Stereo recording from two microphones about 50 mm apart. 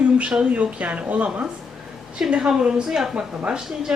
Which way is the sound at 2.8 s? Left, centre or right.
Centre.